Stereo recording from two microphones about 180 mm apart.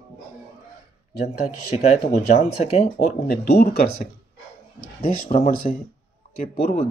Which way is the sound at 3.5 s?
55° left (ahead or behind).